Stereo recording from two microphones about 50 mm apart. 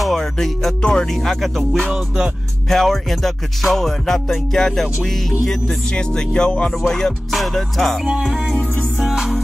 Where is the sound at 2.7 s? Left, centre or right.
Centre.